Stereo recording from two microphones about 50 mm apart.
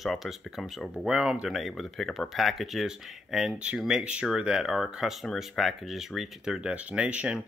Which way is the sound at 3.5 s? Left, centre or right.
Right.